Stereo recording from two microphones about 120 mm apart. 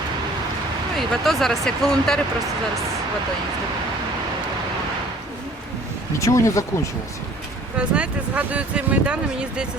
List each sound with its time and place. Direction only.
0.9 s speech: centre (ahead or behind)
6.1 s speech: 25° left (ahead or behind)
7.8 s speech: 10° right (ahead or behind)